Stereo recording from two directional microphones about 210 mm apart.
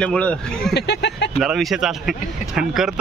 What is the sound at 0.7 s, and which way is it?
Speech, 50° left (ahead or behind).